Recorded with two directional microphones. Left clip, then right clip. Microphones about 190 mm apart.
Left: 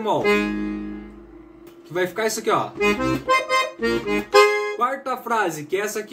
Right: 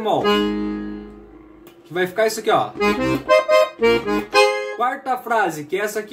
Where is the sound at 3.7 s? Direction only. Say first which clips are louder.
Right 5 dB; 20° right (ahead or behind).